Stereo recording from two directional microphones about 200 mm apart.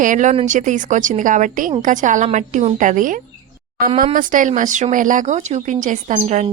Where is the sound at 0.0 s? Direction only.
40° right (ahead or behind).